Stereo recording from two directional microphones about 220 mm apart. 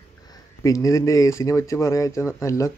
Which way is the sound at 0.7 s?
15° left (ahead or behind).